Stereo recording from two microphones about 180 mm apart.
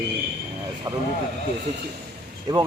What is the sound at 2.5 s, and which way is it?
Speech, 25° right (ahead or behind).